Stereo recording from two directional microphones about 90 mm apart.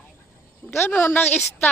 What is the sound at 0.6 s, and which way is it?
Speech, 25° left (ahead or behind).